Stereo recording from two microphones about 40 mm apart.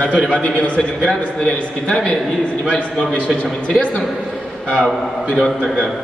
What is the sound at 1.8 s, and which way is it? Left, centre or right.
Speech, left.